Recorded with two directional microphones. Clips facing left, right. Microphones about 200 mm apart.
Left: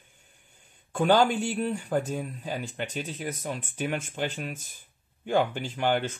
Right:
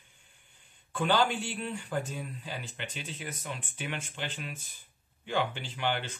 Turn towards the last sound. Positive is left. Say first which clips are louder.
# left 7 dB
turn(degrees=45)  # may be behind; listen again after turning